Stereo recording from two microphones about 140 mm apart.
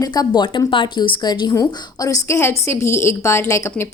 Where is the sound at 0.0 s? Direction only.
30° left (ahead or behind).